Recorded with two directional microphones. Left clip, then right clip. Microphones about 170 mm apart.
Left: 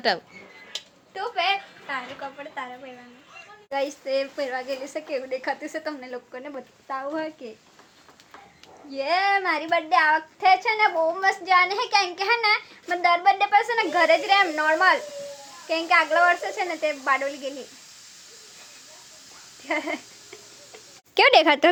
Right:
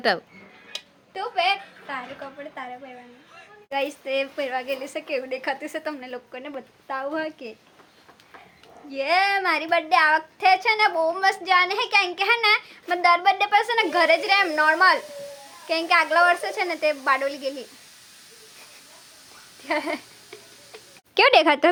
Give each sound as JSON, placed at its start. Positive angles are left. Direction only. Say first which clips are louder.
{"t": 0.7, "sound": "a sound", "louder": "even", "side_deg": -15}
{"t": 2.6, "sound": "a woman's voice", "louder": "left 2 dB", "side_deg": 0}
{"t": 3.7, "sound": "child singing", "louder": "even", "side_deg": 0}
{"t": 8.9, "sound": "child singing", "louder": "right 1 dB", "side_deg": -10}
{"t": 19.6, "sound": "a sound", "louder": "right 1 dB", "side_deg": -20}
{"t": 21.2, "sound": "a woman's voice", "louder": "even", "side_deg": 0}